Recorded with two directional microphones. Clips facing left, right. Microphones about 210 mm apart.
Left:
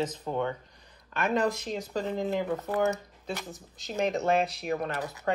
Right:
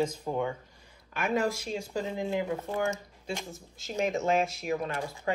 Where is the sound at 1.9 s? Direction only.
10° right (ahead or behind).